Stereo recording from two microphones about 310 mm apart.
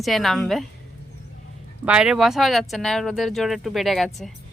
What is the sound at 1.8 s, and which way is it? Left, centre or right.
Speech, centre.